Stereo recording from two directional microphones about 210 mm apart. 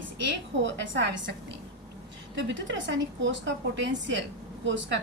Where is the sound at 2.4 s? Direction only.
60° right (ahead or behind).